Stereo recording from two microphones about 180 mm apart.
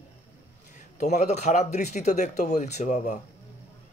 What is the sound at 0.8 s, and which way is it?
Speech, 40° left (ahead or behind).